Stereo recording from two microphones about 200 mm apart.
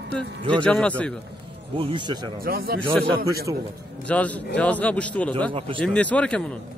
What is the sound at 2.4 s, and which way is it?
Speech, 50° right (ahead or behind).